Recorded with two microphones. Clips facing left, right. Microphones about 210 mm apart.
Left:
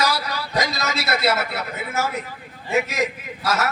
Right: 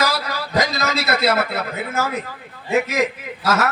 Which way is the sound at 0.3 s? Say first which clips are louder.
Right 3 dB; 55° right (ahead or behind).